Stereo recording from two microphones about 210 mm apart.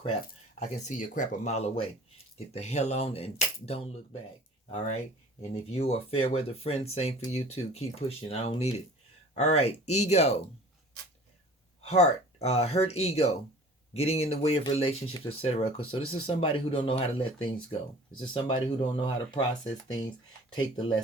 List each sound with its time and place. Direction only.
0.6 s speech: 35° left (ahead or behind)
5.4 s speech: 30° left (ahead or behind)
11.8 s speech: 30° left (ahead or behind)
20.6 s speech: 20° left (ahead or behind)